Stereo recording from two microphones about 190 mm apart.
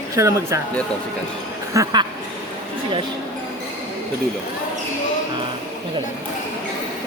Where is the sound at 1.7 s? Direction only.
20° right (ahead or behind).